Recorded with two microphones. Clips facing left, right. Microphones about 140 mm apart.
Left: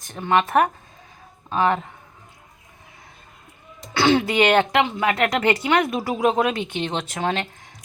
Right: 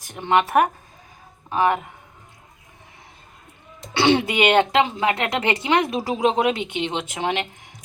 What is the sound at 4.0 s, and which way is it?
A woman's voice, 30° right (ahead or behind).